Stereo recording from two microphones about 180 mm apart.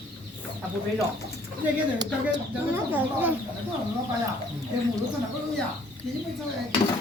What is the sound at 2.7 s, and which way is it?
Speech, 10° right (ahead or behind).